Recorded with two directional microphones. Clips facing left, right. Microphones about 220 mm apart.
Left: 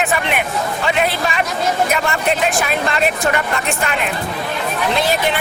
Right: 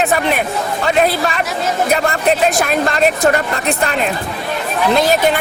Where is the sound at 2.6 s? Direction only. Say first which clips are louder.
Right 4 dB; 40° right (ahead or behind).